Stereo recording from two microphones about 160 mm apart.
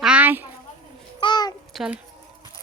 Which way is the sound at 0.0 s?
10° right (ahead or behind).